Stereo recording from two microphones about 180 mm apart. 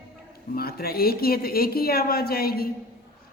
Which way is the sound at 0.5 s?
60° left (ahead or behind).